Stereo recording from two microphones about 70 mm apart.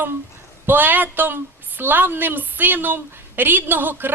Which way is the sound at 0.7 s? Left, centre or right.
Right.